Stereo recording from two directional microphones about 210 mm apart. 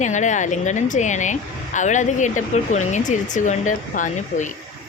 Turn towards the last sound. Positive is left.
turn(degrees=35)  # may be behind; listen again after turning